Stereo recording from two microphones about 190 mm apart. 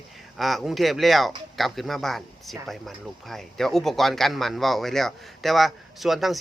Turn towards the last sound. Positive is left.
turn(degrees=0)  # may be behind; listen again after turning